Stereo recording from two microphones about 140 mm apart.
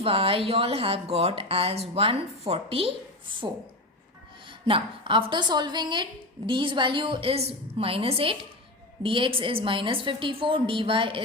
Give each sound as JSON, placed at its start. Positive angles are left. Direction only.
{"t": 0.0, "sound": "a woman's voice", "side_deg": -40}